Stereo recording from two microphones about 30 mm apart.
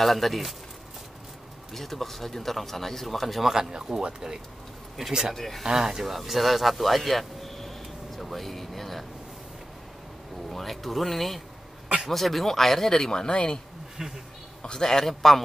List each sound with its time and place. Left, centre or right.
0.0 s speech: centre
1.7 s speech: centre
3.9 s speech: centre
5.8 s speech: centre
6.0 s speech: centre
10.5 s speech: centre
13.0 s speech: left
13.3 s speech: left
13.9 s speech: centre
14.6 s speech: left; by 15.4 s centre